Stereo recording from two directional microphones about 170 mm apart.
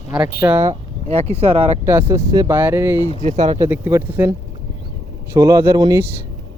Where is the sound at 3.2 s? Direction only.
45° right (ahead or behind).